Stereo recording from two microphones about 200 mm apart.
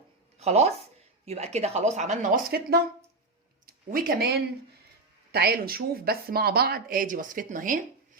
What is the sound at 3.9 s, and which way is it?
A woman's voice, 45° right (ahead or behind).